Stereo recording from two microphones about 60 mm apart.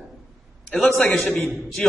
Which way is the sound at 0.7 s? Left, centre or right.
Left.